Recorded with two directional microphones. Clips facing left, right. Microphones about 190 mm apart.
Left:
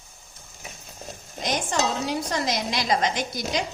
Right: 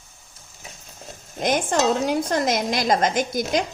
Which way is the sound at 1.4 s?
55° right (ahead or behind).